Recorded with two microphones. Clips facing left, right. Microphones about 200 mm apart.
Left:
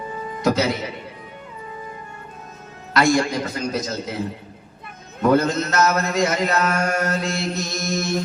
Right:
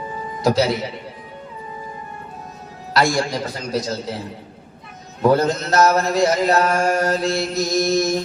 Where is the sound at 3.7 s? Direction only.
35° right (ahead or behind).